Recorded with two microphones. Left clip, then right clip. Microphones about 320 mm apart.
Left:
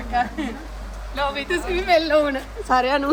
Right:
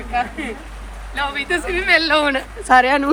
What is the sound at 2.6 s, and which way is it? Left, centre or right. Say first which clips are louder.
Speech: right 6 dB; right.